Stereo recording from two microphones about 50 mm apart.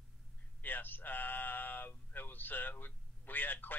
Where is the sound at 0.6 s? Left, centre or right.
Left.